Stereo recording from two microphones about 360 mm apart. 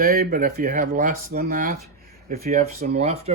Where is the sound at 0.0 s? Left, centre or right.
Right.